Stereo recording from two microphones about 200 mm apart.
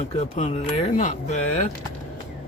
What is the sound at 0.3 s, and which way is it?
Speech, 35° left (ahead or behind).